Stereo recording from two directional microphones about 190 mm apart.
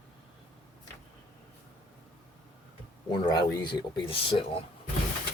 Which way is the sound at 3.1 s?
25° left (ahead or behind).